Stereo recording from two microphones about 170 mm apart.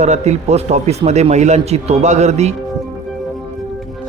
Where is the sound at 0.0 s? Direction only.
40° right (ahead or behind).